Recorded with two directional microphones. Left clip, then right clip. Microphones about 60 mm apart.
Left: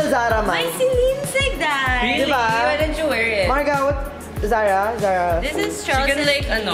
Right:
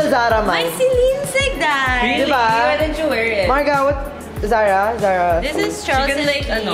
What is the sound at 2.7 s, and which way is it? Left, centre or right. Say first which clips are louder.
Speech: right 2 dB; centre.